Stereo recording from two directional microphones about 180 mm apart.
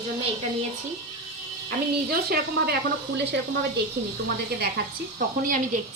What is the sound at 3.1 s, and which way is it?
Speech, 70° right (ahead or behind).